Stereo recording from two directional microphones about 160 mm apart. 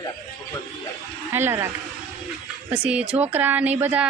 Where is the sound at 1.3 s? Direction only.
15° right (ahead or behind).